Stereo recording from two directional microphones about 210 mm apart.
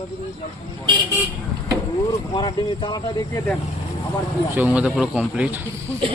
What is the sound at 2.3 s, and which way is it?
Speech, 20° left (ahead or behind).